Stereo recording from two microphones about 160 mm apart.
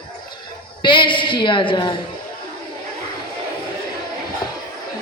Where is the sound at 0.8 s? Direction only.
30° left (ahead or behind).